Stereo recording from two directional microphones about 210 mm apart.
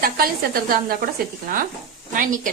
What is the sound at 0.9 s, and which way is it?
A woman's voice, 45° right (ahead or behind).